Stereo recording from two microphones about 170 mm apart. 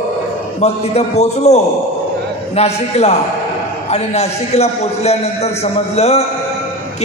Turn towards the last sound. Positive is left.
turn(degrees=40)  # may be behind; listen again after turning